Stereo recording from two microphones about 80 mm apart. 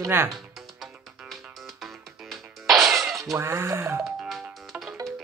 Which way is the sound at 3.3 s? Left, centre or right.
Right.